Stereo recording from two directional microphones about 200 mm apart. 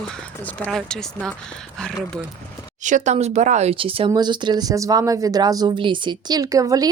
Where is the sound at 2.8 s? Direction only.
35° right (ahead or behind).